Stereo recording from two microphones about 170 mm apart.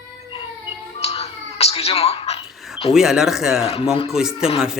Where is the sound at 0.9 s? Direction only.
35° left (ahead or behind).